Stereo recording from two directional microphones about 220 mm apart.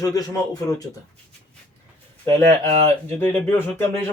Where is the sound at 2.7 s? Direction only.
30° right (ahead or behind).